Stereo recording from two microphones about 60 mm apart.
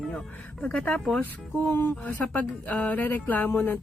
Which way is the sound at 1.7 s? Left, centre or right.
Left.